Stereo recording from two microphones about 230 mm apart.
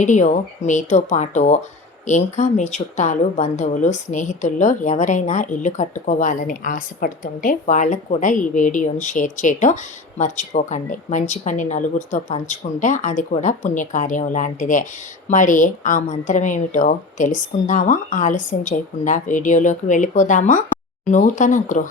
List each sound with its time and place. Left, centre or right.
0.0 s a woman's voice: left